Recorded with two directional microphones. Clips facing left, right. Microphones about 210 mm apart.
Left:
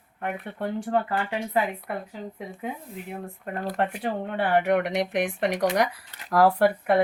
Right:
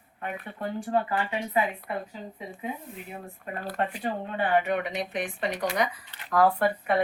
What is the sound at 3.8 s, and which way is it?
Speech, 70° left (ahead or behind).